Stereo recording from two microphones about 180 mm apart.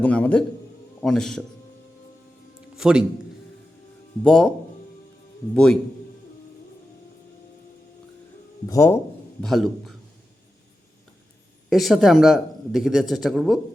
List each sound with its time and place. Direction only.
0.0 s a man's voice: 10° left (ahead or behind)
2.7 s a man's voice: 5° right (ahead or behind)
4.2 s speech: 5° left (ahead or behind)
5.5 s speech: 5° left (ahead or behind)
8.6 s a man's voice: 15° left (ahead or behind)
9.4 s speech: centre (ahead or behind)
11.7 s speech: centre (ahead or behind)